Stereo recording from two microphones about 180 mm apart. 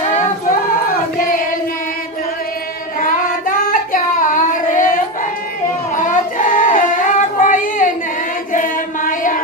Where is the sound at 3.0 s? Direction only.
50° left (ahead or behind).